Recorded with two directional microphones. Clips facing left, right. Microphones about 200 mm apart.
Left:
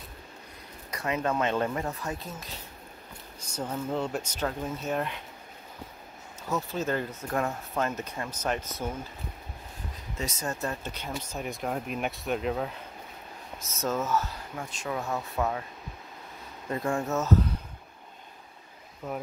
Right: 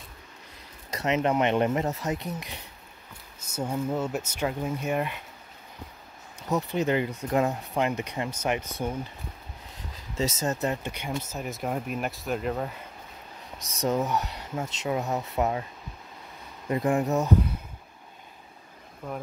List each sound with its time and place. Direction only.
0.9 s speech: 20° right (ahead or behind)
6.5 s speech: 15° right (ahead or behind)
10.1 s speech: 25° right (ahead or behind)
11.2 s speech: centre (ahead or behind)
13.8 s speech: 15° right (ahead or behind)
16.6 s speech: 20° right (ahead or behind)
19.0 s speech: 5° left (ahead or behind)